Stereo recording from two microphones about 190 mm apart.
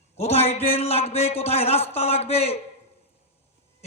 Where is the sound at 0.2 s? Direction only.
35° left (ahead or behind).